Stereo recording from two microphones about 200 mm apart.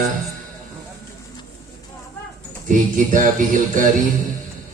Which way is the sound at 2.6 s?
40° right (ahead or behind).